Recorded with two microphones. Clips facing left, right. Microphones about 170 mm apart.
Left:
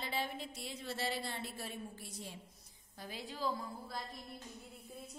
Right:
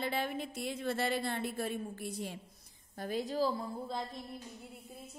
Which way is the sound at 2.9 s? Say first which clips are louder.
Right 11 dB; 50° right (ahead or behind).